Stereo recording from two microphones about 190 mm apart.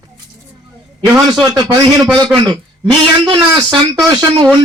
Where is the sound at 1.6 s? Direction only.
20° right (ahead or behind).